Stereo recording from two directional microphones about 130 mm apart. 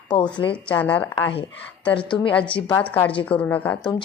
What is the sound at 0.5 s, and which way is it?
Speech, 10° left (ahead or behind).